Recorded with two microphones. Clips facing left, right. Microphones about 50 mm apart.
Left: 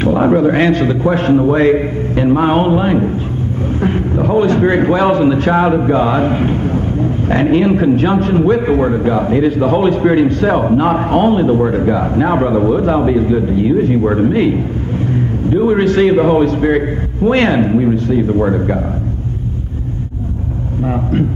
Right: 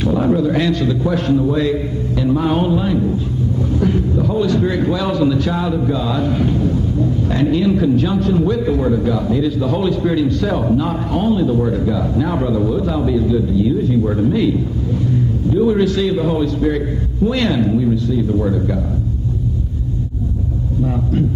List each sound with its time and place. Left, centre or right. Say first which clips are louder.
0.0 s a man's voice: left 5 dB; left
20.8 s a man's voice: left 3 dB; left